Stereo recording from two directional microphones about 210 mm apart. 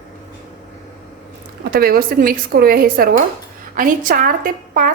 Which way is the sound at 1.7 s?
45° right (ahead or behind).